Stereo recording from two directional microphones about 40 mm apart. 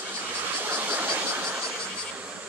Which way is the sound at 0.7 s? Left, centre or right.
Right.